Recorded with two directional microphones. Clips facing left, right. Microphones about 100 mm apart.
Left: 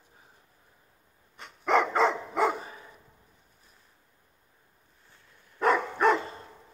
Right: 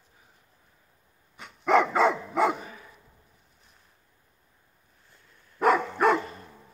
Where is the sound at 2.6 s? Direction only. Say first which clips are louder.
Left 1 dB; 30° left (ahead or behind).